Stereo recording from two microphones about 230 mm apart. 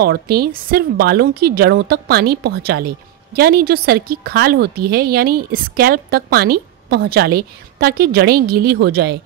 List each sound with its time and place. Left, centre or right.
0.0 s a woman's voice: right